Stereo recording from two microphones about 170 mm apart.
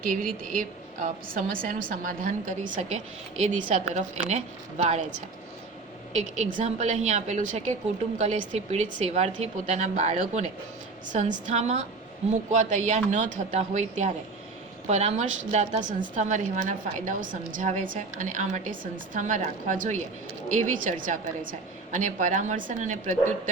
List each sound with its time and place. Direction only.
0.0 s a woman's voice: 55° right (ahead or behind)
6.3 s a woman's voice: 45° right (ahead or behind)